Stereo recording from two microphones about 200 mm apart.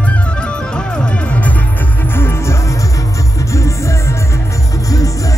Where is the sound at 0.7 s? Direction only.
5° left (ahead or behind).